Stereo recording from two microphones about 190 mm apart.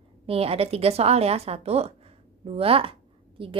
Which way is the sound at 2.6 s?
30° right (ahead or behind).